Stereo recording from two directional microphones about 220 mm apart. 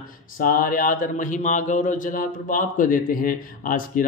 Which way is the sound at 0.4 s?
40° left (ahead or behind).